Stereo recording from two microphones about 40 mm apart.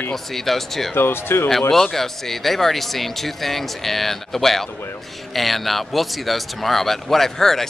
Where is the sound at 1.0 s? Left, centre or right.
Left.